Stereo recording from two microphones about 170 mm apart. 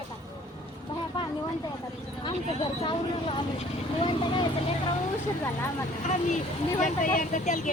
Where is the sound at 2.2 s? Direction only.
30° left (ahead or behind).